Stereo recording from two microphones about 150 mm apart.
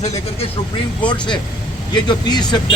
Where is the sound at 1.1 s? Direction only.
30° left (ahead or behind).